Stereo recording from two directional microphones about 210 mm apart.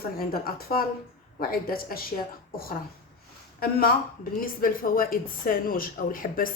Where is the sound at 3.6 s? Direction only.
45° left (ahead or behind).